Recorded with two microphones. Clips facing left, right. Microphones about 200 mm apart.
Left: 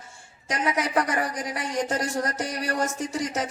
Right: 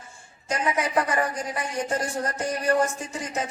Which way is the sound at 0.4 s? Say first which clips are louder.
Even; 85° left.